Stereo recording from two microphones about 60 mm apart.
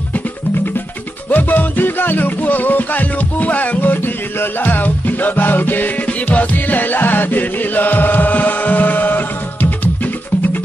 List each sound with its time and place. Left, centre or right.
1.3 s music: left